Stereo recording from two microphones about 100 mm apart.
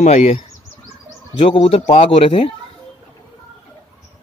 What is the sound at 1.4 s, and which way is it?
Speech, 70° left (ahead or behind).